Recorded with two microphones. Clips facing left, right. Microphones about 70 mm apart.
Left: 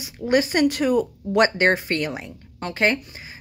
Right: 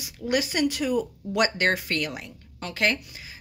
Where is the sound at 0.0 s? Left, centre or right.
Left.